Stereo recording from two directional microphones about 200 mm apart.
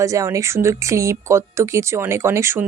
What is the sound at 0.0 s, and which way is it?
A woman's voice, 15° right (ahead or behind).